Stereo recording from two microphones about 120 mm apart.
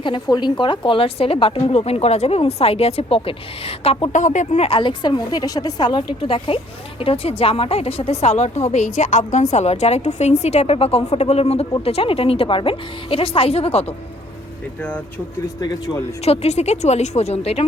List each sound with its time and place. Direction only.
0.0 s a woman's voice: 40° left (ahead or behind)
4.1 s speech: 90° left; by 4.8 s 60° left (ahead or behind)
4.8 s a woman's voice: 40° left (ahead or behind)
6.2 s a woman's voice: 50° left (ahead or behind)
14.8 s speech: 10° left (ahead or behind)
15.6 s a woman's voice: 35° left (ahead or behind)
16.2 s a woman's voice: 60° left (ahead or behind)